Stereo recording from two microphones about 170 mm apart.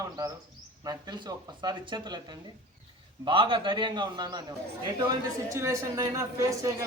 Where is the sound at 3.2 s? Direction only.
30° right (ahead or behind).